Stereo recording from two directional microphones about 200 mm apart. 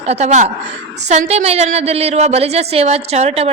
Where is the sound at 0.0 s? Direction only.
35° right (ahead or behind).